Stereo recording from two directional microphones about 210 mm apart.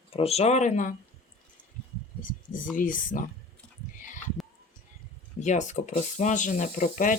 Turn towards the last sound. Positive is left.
turn(degrees=40)  # may be behind; listen again after turning